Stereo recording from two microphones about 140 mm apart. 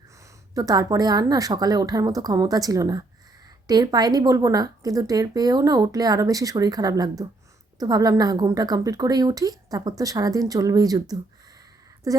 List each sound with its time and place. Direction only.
0.5 s a woman's voice: 25° right (ahead or behind)
12.1 s a woman's voice: 25° right (ahead or behind)